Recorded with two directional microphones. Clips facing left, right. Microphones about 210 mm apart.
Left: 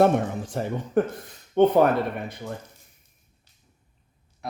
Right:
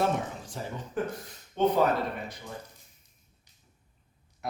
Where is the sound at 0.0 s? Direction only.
60° left (ahead or behind).